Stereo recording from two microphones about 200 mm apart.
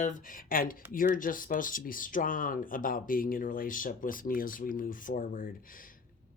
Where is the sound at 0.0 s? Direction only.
45° left (ahead or behind).